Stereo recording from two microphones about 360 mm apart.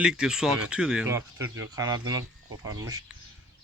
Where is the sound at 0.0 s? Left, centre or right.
Centre.